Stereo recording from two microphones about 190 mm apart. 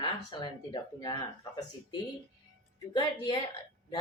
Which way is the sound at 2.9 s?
25° left (ahead or behind).